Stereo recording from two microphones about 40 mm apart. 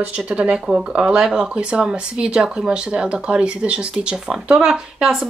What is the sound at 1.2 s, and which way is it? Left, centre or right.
Speech, centre.